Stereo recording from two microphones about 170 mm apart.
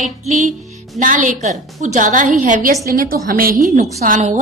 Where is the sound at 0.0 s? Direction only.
45° right (ahead or behind).